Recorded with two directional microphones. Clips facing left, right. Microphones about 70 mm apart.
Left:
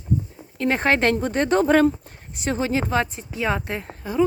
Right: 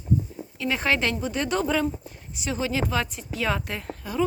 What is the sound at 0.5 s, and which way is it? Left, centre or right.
A woman's voice, left.